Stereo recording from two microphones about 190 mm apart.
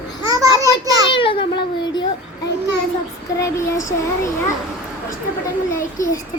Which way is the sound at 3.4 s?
15° left (ahead or behind).